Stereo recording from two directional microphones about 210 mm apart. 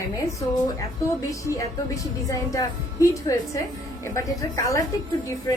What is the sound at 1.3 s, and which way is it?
A woman's voice, 15° left (ahead or behind).